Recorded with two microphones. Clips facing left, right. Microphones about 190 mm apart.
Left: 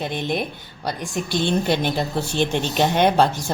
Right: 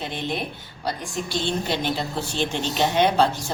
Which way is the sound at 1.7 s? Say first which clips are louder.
Left 4 dB; 55° left (ahead or behind).